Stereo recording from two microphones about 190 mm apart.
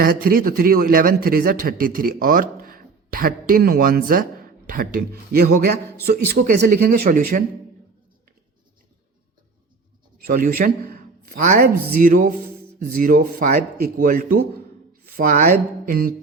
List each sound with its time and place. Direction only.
0.0 s a man's voice: 50° right (ahead or behind)
10.2 s a man's voice: 50° right (ahead or behind)